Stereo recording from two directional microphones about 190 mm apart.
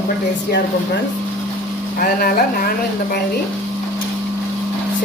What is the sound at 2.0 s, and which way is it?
Speech, 50° left (ahead or behind).